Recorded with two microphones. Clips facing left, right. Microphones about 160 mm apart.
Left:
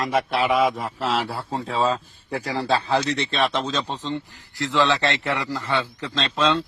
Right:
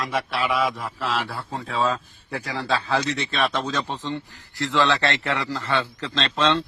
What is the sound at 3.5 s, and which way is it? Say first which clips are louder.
A man's voice: left 1 dB; 15° left (ahead or behind).